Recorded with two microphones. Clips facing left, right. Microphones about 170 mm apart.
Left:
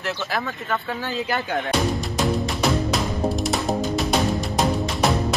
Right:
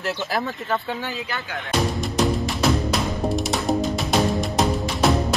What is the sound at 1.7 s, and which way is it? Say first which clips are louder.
Music: right 4 dB; centre (ahead or behind).